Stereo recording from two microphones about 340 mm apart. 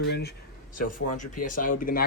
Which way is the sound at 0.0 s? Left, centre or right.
Left.